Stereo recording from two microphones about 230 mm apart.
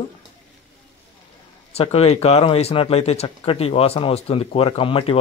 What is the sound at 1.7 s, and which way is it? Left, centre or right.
Speech, left.